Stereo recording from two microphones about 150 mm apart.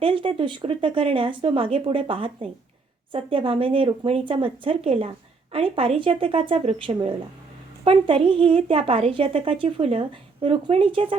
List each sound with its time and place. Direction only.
0.0 s speech: 35° right (ahead or behind)